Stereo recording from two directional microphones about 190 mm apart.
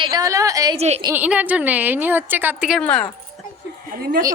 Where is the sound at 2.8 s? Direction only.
5° left (ahead or behind).